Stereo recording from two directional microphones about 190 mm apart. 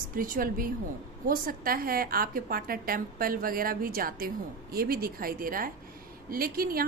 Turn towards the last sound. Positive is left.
turn(degrees=-50)  # may be behind; listen again after turning